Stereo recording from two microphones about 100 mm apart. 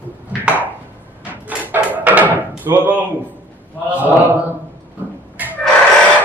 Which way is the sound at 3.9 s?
15° right (ahead or behind).